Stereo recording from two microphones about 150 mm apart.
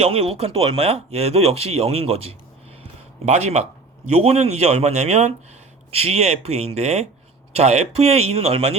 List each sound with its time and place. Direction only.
0.0 s speech: 40° right (ahead or behind)